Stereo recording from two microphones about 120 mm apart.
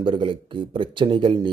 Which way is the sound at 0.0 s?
45° right (ahead or behind).